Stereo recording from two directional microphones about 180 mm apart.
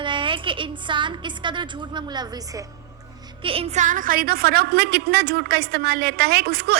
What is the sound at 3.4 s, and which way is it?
A woman's voice, 30° right (ahead or behind).